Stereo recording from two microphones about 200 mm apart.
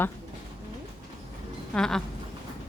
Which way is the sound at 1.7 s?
5° left (ahead or behind).